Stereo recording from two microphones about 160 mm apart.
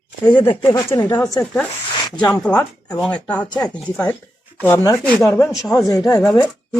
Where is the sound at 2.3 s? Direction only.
5° left (ahead or behind).